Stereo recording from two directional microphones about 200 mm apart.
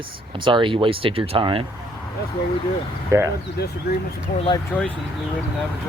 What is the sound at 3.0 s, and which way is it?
Speech, 15° right (ahead or behind).